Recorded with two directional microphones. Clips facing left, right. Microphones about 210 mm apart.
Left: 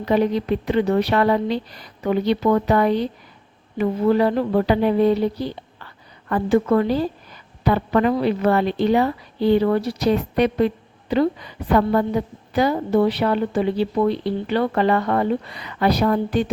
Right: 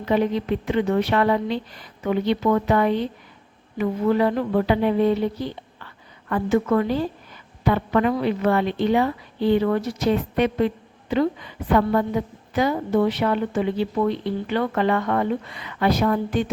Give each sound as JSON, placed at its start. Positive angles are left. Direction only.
{"t": 0.0, "sound": "a woman's voice", "side_deg": 35}
{"t": 3.8, "sound": "a sound", "side_deg": 35}
{"t": 7.6, "sound": "a woman's voice", "side_deg": 35}